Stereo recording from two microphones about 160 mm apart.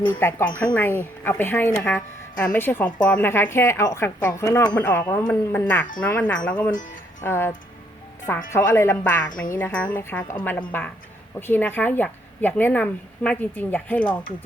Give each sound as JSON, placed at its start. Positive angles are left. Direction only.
{"t": 0.1, "sound": "a woman's voice", "side_deg": 15}